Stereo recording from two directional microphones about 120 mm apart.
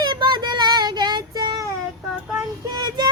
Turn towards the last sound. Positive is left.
turn(degrees=-35)  # may be behind; listen again after turning